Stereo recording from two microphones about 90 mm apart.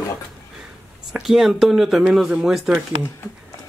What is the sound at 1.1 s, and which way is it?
Speech, 5° right (ahead or behind).